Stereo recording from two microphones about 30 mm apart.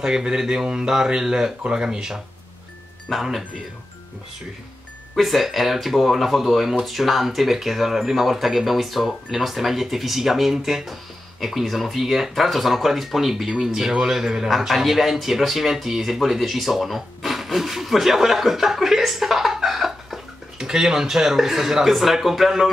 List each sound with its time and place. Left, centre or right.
0.0 s speech: right
3.1 s speech: centre
5.1 s speech: centre
14.7 s speech: centre